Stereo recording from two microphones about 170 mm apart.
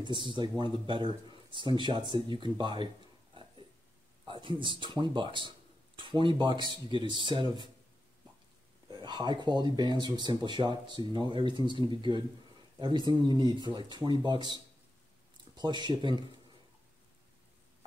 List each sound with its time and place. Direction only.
0.0 s speech: 30° right (ahead or behind)
4.3 s speech: 30° right (ahead or behind)
8.8 s speech: 25° right (ahead or behind)